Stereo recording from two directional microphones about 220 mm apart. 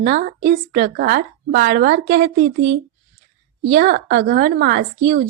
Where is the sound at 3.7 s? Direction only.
40° right (ahead or behind).